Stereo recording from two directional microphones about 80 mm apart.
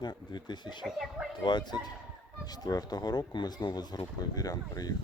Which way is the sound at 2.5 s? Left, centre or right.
Left.